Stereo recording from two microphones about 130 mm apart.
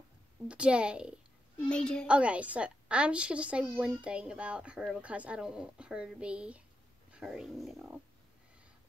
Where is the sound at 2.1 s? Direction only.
10° right (ahead or behind).